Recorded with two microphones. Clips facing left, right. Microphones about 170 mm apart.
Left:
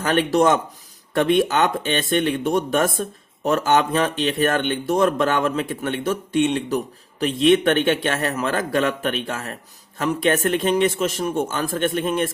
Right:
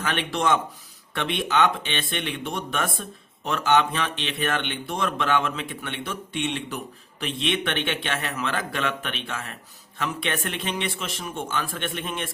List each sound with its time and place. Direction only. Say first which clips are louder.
0.0 s speech: left 8 dB; 40° left (ahead or behind)